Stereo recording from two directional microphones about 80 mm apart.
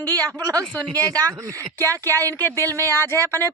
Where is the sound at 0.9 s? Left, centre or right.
Right.